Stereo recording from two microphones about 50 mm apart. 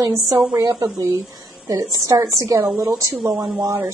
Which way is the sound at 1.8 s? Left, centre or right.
Right.